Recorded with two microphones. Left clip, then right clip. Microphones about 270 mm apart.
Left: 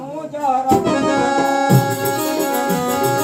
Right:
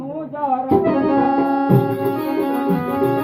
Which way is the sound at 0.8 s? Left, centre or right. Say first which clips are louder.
Even; left.